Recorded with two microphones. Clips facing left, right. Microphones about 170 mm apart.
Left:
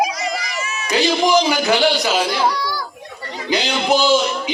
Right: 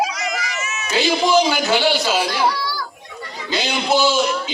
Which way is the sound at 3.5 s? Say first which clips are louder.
Left 2 dB; 15° left (ahead or behind).